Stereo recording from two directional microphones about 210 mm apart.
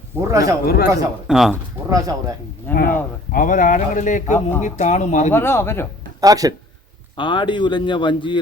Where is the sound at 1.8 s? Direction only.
15° right (ahead or behind).